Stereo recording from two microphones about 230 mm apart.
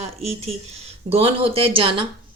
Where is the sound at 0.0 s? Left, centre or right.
Right.